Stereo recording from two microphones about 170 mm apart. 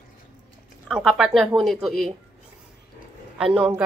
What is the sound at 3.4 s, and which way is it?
Speech, centre (ahead or behind).